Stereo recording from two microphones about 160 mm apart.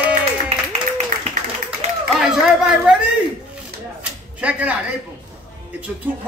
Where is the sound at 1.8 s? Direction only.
45° right (ahead or behind).